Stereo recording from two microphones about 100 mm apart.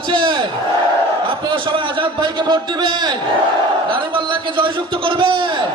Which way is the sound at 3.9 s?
60° right (ahead or behind).